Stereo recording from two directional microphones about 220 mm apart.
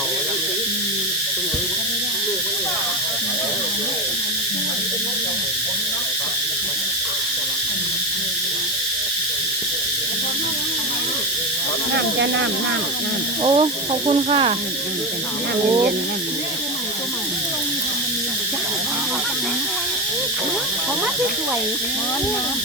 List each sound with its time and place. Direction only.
11.9 s speech: 55° right (ahead or behind)
13.4 s speech: 25° right (ahead or behind)